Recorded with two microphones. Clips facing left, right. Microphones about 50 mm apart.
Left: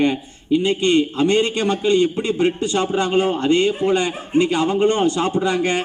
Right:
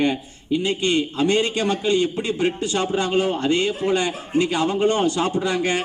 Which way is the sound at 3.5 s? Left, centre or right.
Centre.